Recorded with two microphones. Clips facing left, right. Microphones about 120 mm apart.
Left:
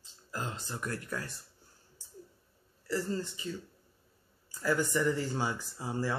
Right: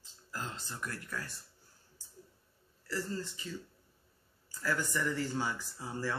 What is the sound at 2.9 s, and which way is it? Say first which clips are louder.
Speech: left 4 dB; 20° left (ahead or behind).